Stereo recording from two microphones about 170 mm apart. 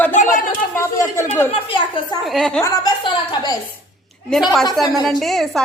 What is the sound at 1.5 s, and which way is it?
Speech, 30° left (ahead or behind).